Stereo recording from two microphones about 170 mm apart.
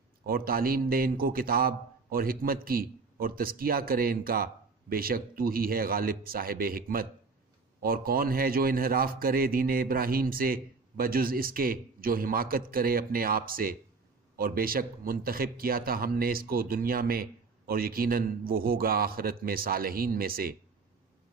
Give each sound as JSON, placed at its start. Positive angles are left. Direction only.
{"t": 0.3, "sound": "a man's voice", "side_deg": -60}